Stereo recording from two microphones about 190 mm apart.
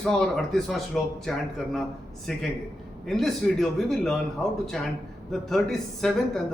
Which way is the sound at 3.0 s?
Centre (ahead or behind).